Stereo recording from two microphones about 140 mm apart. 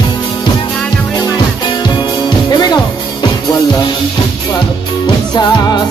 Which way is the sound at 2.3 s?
30° left (ahead or behind).